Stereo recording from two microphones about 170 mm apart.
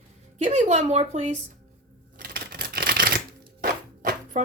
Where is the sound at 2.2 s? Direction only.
60° right (ahead or behind).